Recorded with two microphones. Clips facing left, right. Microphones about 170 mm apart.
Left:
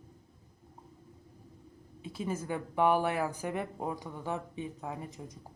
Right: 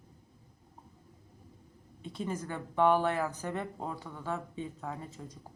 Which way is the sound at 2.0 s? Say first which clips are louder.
Left 1 dB; 5° left (ahead or behind).